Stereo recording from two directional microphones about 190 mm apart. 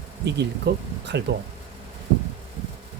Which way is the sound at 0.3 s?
60° right (ahead or behind).